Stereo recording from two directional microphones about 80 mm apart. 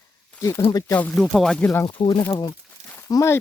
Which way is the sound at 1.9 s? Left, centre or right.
Left.